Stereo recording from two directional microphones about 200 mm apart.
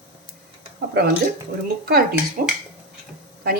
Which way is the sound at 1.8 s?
50° right (ahead or behind).